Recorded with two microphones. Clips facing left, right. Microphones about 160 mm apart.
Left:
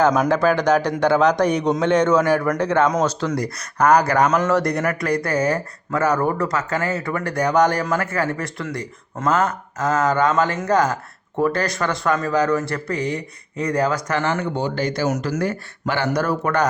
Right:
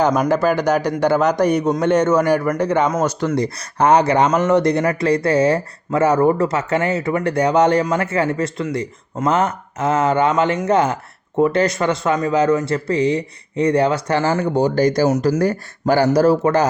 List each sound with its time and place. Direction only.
0.3 s a man's voice: 10° right (ahead or behind); by 16.6 s 30° right (ahead or behind)